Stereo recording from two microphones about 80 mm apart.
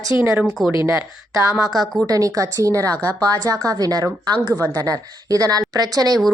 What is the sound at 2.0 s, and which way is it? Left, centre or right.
Speech, right.